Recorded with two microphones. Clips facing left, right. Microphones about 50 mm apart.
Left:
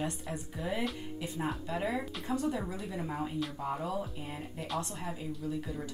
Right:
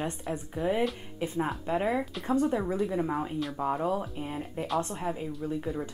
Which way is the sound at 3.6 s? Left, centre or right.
Right.